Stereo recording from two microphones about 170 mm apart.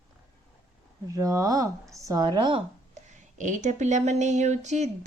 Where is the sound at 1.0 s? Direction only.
20° right (ahead or behind).